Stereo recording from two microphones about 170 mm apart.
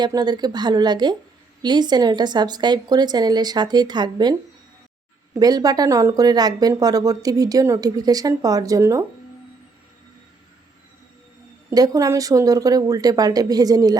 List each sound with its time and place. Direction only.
0.0 s speech: 25° right (ahead or behind)
11.7 s speech: 20° right (ahead or behind)